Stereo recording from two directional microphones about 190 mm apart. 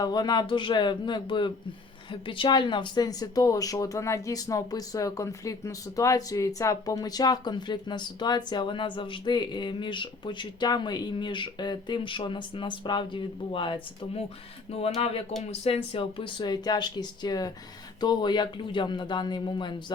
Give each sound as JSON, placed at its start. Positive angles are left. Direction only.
{"t": 0.0, "sound": "speech", "side_deg": 20}